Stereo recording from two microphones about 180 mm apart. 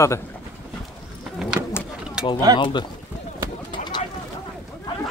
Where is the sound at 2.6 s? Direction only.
25° left (ahead or behind).